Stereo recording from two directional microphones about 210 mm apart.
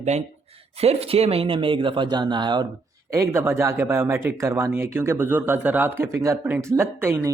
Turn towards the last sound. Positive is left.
turn(degrees=-10)  # may be behind; listen again after turning